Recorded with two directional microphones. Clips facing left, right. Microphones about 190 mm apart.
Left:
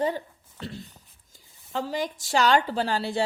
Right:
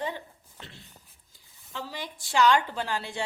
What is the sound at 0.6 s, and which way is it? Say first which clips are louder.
A woman's voice: left 11 dB; 40° left (ahead or behind).